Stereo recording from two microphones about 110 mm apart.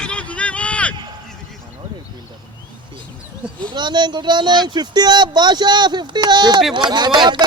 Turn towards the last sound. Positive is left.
turn(degrees=-40)  # may be behind; listen again after turning